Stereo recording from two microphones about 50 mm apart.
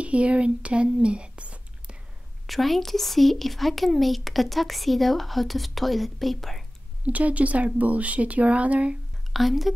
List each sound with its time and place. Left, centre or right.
0.0 s speech: right
2.4 s speech: centre
7.1 s speech: right
9.3 s speech: centre